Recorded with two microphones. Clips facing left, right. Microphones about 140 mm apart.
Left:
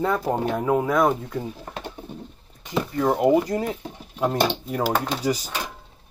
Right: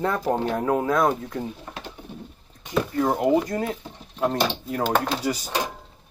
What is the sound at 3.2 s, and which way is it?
Speech, 10° left (ahead or behind).